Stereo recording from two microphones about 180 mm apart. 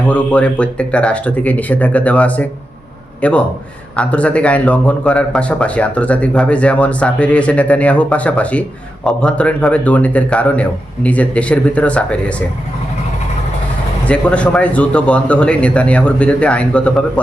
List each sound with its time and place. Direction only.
0.0 s a man's voice: 10° left (ahead or behind)
14.1 s speech: 5° left (ahead or behind)